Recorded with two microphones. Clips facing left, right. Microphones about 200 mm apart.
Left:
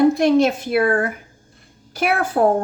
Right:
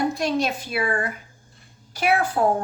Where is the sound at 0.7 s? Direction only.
50° left (ahead or behind).